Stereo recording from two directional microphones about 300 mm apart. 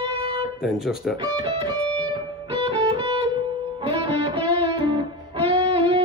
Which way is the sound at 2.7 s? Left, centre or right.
Centre.